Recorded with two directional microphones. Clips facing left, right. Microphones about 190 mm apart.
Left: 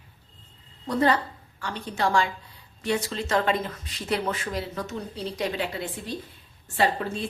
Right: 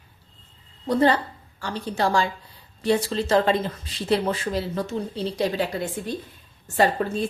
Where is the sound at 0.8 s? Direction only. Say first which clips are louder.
Right 3 dB; 30° right (ahead or behind).